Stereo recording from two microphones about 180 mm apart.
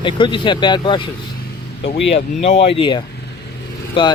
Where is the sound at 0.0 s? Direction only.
25° left (ahead or behind).